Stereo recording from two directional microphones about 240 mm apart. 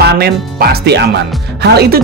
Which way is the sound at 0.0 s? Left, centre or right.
Right.